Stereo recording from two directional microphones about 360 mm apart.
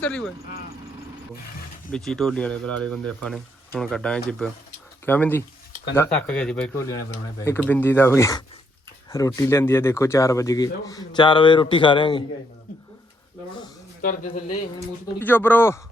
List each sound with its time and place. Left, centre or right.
0.0 s speech: centre
1.9 s speech: centre
14.0 s speech: left
15.2 s speech: centre